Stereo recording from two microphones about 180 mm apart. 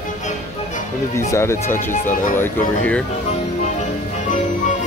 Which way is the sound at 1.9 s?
45° left (ahead or behind).